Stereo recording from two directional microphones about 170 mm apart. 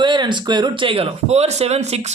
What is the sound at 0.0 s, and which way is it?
Speech, 25° right (ahead or behind).